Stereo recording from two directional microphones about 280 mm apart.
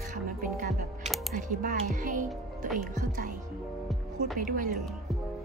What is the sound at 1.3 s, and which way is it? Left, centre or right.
Speech, right.